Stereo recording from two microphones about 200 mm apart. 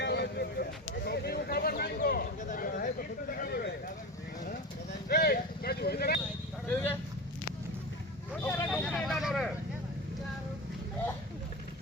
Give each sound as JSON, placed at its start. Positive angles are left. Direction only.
{"t": 0.0, "sound": "a sound", "side_deg": 60}
{"t": 5.0, "sound": "vehicle", "side_deg": 50}
{"t": 8.4, "sound": "vehicle", "side_deg": 10}